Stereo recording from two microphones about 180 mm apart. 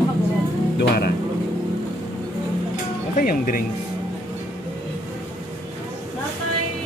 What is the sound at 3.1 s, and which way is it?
Speech, 50° left (ahead or behind).